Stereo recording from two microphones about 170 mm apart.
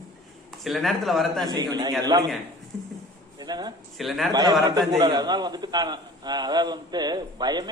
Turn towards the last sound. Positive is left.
turn(degrees=-25)  # may be behind; listen again after turning